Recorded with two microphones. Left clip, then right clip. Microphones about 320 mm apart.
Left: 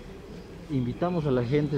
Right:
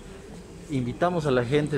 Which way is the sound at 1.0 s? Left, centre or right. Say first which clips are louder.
Right 4 dB; right.